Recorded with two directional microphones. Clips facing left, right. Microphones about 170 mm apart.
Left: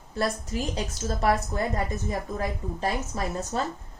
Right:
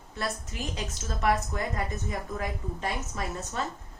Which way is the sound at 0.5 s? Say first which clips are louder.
Left 6 dB; 35° left (ahead or behind).